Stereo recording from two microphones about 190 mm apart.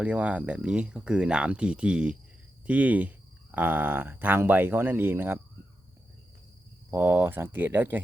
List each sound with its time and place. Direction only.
0.0 s speech: 5° right (ahead or behind)
6.9 s speech: 15° right (ahead or behind)